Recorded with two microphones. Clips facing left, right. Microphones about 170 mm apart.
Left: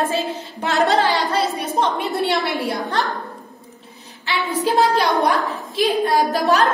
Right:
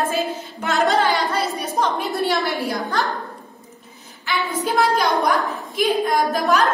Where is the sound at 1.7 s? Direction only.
25° left (ahead or behind).